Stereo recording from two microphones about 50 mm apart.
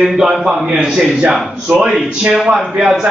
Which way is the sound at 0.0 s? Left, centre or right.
Centre.